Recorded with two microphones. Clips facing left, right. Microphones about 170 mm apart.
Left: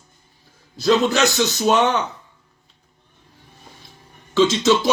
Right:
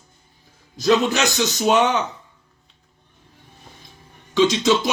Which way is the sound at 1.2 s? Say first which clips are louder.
Left 3 dB; 15° right (ahead or behind).